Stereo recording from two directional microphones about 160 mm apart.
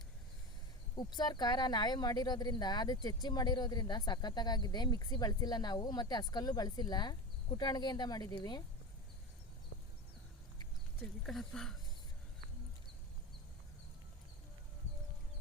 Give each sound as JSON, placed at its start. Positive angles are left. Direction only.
{"t": 0.9, "sound": "speech", "side_deg": 25}
{"t": 11.3, "sound": "speech", "side_deg": 0}